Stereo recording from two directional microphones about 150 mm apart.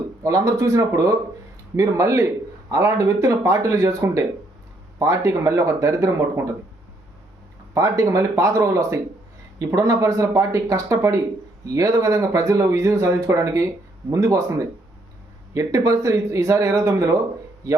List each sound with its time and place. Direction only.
0.2 s speech: 20° right (ahead or behind)
7.7 s speech: 20° right (ahead or behind)
15.5 s speech: 20° right (ahead or behind)